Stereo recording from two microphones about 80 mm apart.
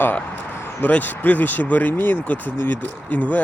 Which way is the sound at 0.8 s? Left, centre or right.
Left.